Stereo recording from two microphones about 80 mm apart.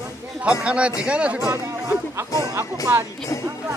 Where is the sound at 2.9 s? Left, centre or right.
Right.